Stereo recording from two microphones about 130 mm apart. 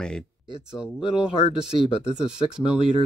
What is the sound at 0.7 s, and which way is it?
Speech, 5° right (ahead or behind).